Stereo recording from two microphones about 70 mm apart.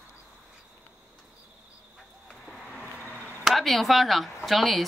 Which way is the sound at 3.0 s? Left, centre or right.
Left.